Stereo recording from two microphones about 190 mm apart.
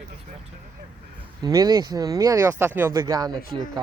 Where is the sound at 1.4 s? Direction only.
20° right (ahead or behind).